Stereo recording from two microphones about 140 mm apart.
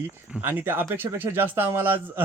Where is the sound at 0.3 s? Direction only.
10° right (ahead or behind).